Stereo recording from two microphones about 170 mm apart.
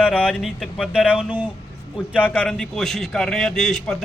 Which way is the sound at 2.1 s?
10° left (ahead or behind).